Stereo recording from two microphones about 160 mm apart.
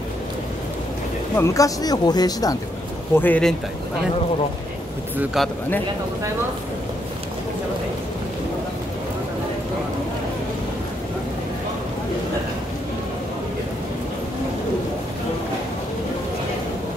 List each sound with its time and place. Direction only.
1.3 s speech: 20° left (ahead or behind)
3.2 s speech: 10° left (ahead or behind)
5.1 s speech: 10° right (ahead or behind)